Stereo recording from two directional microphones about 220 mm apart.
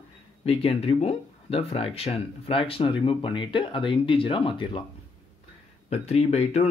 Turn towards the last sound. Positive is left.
turn(degrees=30)  # may be behind; listen again after turning